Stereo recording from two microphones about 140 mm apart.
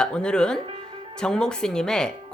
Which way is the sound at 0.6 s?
40° right (ahead or behind).